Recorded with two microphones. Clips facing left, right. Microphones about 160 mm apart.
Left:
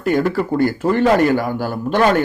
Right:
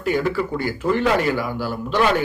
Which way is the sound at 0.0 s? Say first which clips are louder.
Left 4 dB; 50° left (ahead or behind).